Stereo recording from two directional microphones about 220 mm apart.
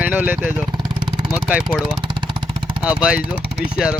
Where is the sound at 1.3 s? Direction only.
Centre (ahead or behind).